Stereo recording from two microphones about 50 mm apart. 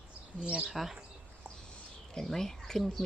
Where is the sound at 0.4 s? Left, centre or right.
Right.